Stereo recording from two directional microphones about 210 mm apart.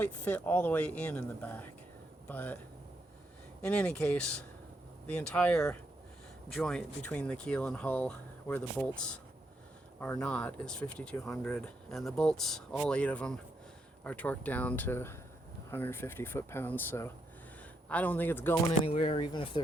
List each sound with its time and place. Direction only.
0.0 s speech: 10° left (ahead or behind)
3.6 s speech: 5° left (ahead or behind)
18.8 s speech: 30° left (ahead or behind)